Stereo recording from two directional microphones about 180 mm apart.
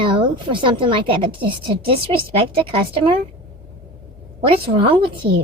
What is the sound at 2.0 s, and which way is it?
A woman's voice, 30° right (ahead or behind).